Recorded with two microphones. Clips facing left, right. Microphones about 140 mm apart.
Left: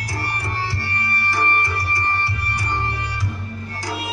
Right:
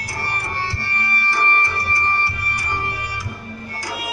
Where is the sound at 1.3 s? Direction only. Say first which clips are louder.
Right 1 dB; 15° left (ahead or behind).